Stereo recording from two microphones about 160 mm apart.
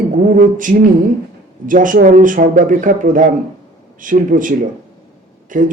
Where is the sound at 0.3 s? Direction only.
55° right (ahead or behind).